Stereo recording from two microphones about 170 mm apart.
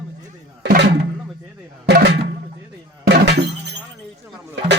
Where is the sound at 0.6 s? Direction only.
85° right.